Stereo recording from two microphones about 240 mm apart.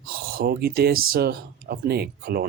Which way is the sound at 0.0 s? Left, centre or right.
Right.